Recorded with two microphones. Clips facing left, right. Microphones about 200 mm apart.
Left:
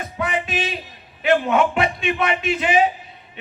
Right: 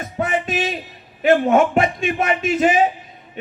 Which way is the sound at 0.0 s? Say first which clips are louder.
Right 3 dB; 45° right (ahead or behind).